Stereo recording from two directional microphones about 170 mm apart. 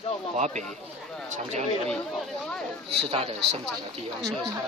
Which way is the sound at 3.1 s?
35° right (ahead or behind).